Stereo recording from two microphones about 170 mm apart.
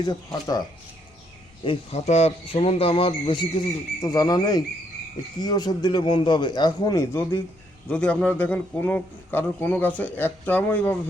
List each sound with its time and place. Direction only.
0.0 s a man's voice: 20° left (ahead or behind)
1.6 s a man's voice: 35° left (ahead or behind)
4.0 s a man's voice: 20° left (ahead or behind)